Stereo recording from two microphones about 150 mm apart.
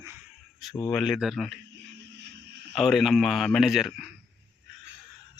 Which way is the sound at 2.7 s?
Centre (ahead or behind).